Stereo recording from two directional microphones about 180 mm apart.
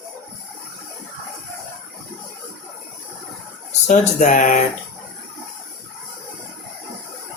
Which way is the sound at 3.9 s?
45° left (ahead or behind).